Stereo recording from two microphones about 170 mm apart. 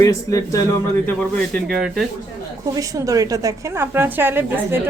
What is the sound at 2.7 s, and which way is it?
A woman's voice, 20° right (ahead or behind).